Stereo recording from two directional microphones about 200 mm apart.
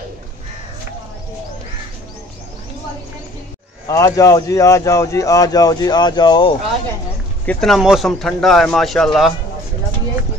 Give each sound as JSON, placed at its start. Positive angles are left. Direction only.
{"t": 3.8, "sound": "speech", "side_deg": 15}
{"t": 7.4, "sound": "speech", "side_deg": 0}